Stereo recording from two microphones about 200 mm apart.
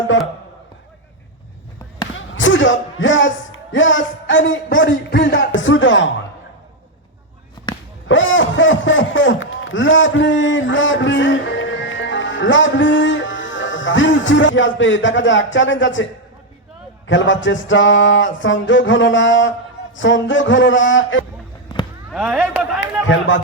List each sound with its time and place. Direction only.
2.1 s speech: 70° left (ahead or behind)
5.5 s a sound: 70° left (ahead or behind)
8.0 s a man's voice: 70° left (ahead or behind)
17.1 s a sound: 70° left (ahead or behind)
22.1 s a man's voice: 5° right (ahead or behind)
22.8 s speech: 70° left (ahead or behind)